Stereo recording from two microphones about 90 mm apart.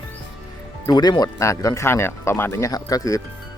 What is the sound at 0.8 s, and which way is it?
Speech, 50° left (ahead or behind).